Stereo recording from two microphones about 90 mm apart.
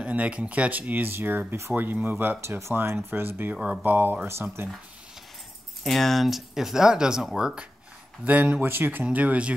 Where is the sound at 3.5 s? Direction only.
10° right (ahead or behind).